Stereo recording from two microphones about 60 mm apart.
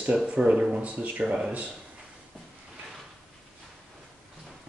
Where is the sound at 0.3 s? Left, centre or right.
Centre.